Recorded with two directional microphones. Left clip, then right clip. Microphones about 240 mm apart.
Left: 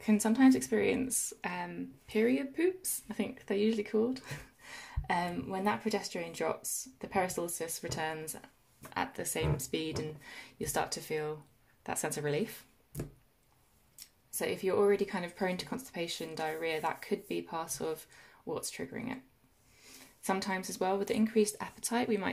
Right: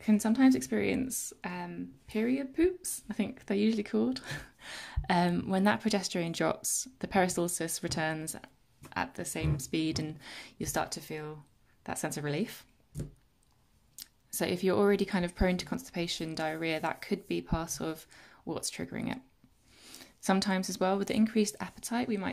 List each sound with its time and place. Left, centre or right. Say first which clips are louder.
0.0 s speech: even; centre
14.3 s speech: right 2 dB; right; by 22.3 s centre